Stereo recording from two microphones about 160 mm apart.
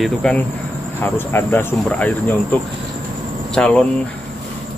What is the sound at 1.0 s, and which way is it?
Speech, 15° left (ahead or behind).